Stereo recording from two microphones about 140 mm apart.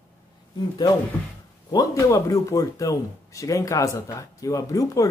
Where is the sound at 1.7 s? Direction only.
25° left (ahead or behind).